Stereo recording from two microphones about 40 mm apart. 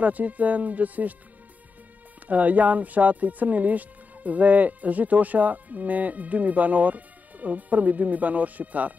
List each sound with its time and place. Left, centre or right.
0.0 s speech: right
2.2 s speech: right